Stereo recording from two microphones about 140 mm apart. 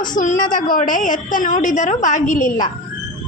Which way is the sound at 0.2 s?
70° left (ahead or behind).